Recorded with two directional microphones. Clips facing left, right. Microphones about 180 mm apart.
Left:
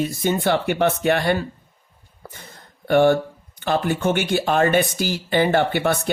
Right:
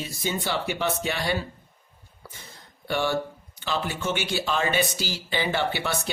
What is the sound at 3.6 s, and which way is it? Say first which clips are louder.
Speech: left 8 dB; 55° left (ahead or behind).